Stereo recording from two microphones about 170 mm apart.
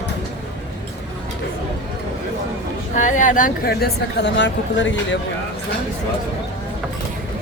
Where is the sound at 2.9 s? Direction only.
50° left (ahead or behind); by 5.2 s 90° left.